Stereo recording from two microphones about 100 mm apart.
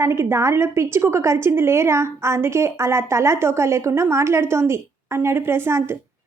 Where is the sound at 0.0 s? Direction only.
25° right (ahead or behind).